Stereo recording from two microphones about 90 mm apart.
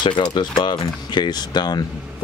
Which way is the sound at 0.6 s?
55° left (ahead or behind).